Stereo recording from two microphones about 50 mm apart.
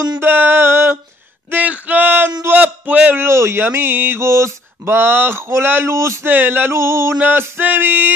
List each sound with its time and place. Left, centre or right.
0.2 s music: right
1.5 s a man's voice: right
3.2 s speech: right
3.6 s music: right
4.2 s a sound: right
4.8 s music: right
5.9 s a sound: right
6.2 s music: right
6.8 s speech: right
7.2 s speech: right